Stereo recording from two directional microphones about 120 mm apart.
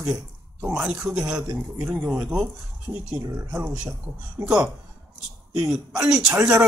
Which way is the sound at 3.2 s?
20° right (ahead or behind).